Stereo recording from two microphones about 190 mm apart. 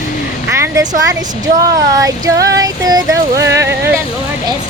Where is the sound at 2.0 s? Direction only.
20° right (ahead or behind).